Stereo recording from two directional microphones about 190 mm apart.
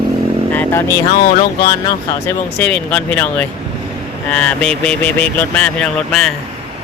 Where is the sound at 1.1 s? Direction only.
50° left (ahead or behind).